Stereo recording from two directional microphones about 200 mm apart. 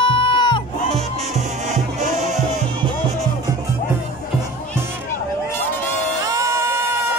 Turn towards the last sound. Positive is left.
turn(degrees=-15)  # may be behind; listen again after turning